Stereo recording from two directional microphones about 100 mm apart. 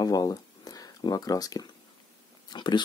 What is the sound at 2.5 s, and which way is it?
Speech, 50° left (ahead or behind).